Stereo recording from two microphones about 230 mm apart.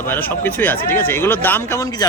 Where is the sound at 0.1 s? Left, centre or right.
Centre.